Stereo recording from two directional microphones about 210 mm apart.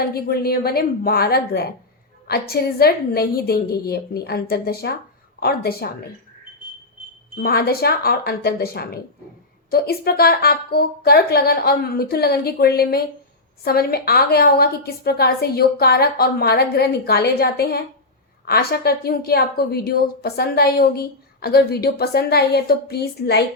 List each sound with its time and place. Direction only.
0.0 s a woman's voice: 45° left (ahead or behind)
7.3 s a woman's voice: 45° left (ahead or behind)